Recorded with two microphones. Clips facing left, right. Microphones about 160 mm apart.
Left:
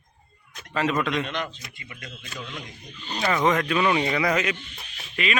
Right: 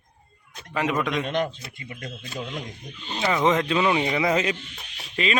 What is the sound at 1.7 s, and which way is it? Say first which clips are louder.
Speech: right 5 dB; 45° right (ahead or behind).